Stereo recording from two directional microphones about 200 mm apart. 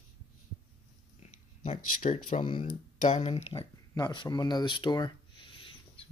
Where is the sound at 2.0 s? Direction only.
40° left (ahead or behind).